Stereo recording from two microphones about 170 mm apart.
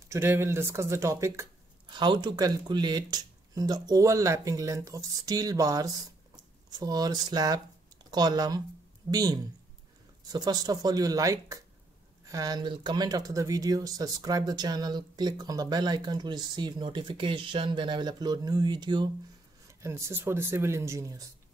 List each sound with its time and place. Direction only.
0.1 s speech: 15° right (ahead or behind)